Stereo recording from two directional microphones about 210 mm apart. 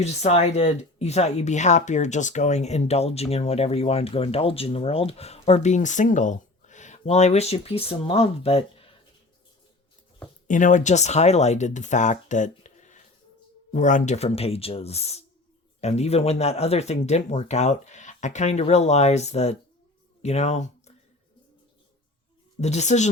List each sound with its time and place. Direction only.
0.0 s speech: 30° left (ahead or behind)
10.5 s speech: 35° left (ahead or behind)
22.6 s speech: 30° left (ahead or behind)